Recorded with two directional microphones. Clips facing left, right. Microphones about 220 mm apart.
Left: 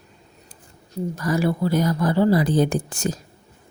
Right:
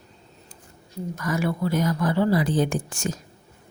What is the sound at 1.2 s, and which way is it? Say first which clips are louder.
A woman's voice: left 3 dB; 35° left (ahead or behind).